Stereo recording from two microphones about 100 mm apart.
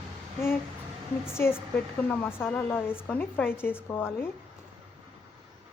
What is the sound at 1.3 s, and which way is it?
A woman's voice, 25° left (ahead or behind).